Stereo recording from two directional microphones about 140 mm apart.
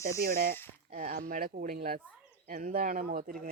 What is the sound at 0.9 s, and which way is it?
Speech, 80° right.